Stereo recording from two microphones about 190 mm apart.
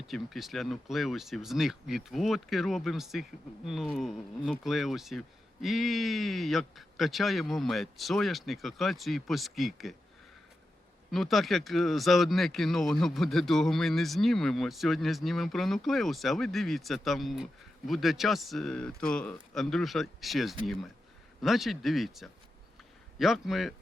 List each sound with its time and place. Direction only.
0.1 s speech: centre (ahead or behind)
11.1 s speech: centre (ahead or behind)